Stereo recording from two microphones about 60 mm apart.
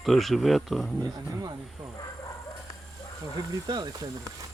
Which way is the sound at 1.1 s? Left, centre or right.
Right.